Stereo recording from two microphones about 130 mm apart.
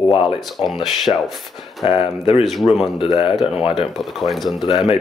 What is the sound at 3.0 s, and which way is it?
Speech, 40° left (ahead or behind).